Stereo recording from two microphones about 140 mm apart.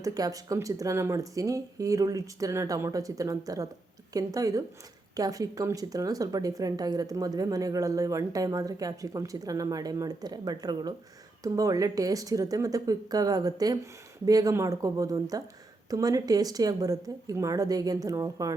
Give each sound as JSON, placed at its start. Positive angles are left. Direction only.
{"t": 0.0, "sound": "speech", "side_deg": -25}